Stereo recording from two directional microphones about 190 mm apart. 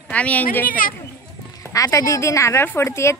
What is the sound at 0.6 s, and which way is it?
Speech, 45° left (ahead or behind).